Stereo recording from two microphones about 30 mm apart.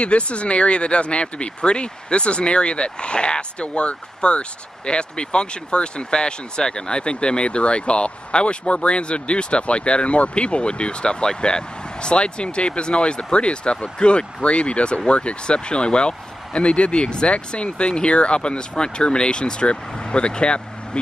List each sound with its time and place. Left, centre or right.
0.0 s speech: left